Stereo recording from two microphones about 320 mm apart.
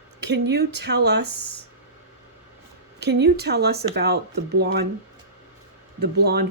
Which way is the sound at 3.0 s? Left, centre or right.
Right.